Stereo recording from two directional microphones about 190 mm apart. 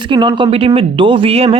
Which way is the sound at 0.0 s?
25° right (ahead or behind).